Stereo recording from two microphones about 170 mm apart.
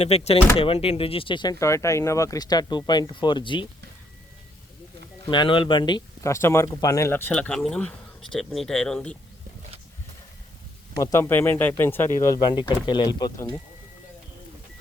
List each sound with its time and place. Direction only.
0.0 s speech: 40° left (ahead or behind)
5.3 s speech: 30° left (ahead or behind); by 9.1 s 5° left (ahead or behind)
11.0 s speech: 15° left (ahead or behind)